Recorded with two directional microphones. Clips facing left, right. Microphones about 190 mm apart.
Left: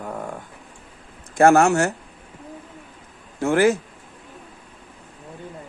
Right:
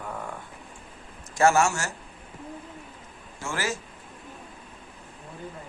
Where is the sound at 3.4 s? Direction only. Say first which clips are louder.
Left 14 dB; 60° left (ahead or behind).